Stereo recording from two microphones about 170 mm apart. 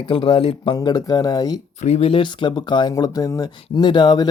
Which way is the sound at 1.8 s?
35° left (ahead or behind).